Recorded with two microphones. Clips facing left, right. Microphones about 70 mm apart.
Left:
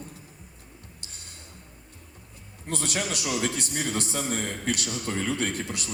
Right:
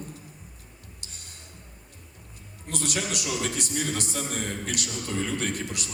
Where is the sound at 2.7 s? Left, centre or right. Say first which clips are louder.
Left 1 dB; left.